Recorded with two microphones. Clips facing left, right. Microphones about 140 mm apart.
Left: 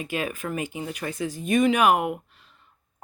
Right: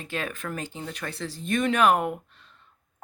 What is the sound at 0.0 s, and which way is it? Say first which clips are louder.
A woman's voice: left 3 dB; 10° left (ahead or behind).